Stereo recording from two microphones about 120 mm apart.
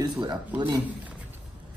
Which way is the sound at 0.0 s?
40° right (ahead or behind).